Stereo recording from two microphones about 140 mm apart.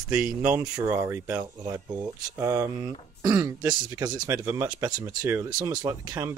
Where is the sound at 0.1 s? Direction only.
10° right (ahead or behind).